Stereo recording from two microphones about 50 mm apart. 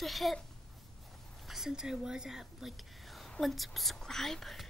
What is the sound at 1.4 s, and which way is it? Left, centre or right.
Speech, centre.